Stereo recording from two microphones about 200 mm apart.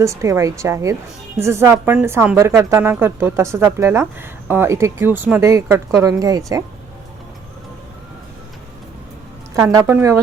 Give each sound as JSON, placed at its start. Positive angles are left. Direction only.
{"t": 0.0, "sound": "a woman's voice", "side_deg": -15}
{"t": 9.6, "sound": "a woman's voice", "side_deg": -15}